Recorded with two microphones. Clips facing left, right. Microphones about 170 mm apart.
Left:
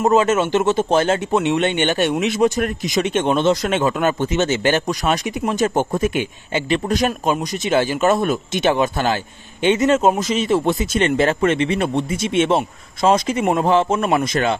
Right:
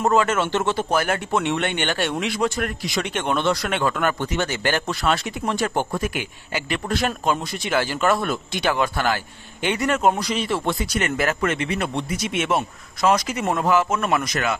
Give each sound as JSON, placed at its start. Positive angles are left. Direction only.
{"t": 0.0, "sound": "speech", "side_deg": 20}